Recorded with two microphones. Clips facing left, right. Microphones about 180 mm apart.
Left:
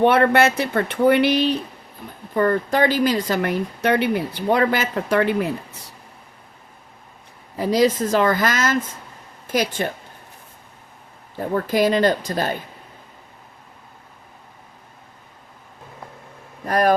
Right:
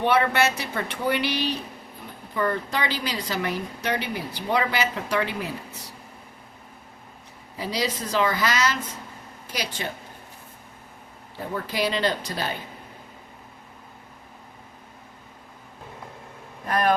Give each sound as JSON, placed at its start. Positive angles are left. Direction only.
{"t": 0.0, "sound": "a woman's voice", "side_deg": 55}
{"t": 7.6, "sound": "a woman's voice", "side_deg": 50}
{"t": 11.3, "sound": "a woman's voice", "side_deg": 50}
{"t": 16.6, "sound": "speech", "side_deg": 40}